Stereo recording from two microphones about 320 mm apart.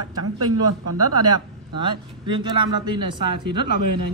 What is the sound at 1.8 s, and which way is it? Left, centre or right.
Speech, centre.